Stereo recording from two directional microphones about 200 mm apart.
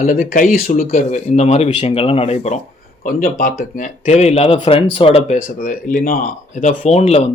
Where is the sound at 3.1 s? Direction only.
45° left (ahead or behind).